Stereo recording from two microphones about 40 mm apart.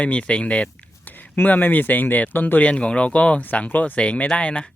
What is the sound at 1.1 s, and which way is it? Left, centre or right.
Speech, left.